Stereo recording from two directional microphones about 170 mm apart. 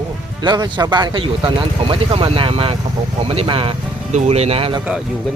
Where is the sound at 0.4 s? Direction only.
25° right (ahead or behind).